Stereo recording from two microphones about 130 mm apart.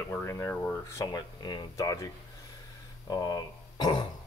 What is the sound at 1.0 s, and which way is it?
Speech, 35° left (ahead or behind).